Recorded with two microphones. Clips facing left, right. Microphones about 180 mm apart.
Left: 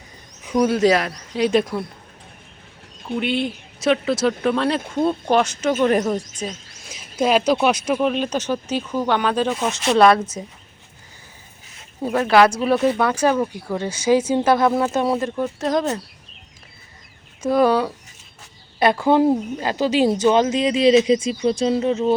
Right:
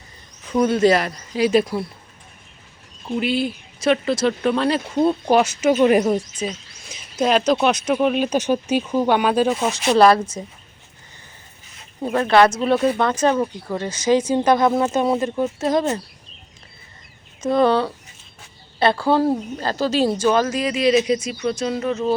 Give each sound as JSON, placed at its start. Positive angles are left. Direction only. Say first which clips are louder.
{"t": 0.6, "sound": "speech", "louder": "right 1 dB", "side_deg": 0}
{"t": 3.2, "sound": "speech", "louder": "right 1 dB", "side_deg": -5}
{"t": 12.0, "sound": "speech", "louder": "even", "side_deg": 5}
{"t": 17.4, "sound": "speech", "louder": "even", "side_deg": 10}